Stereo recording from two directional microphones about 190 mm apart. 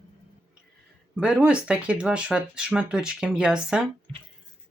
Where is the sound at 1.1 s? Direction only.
5° right (ahead or behind).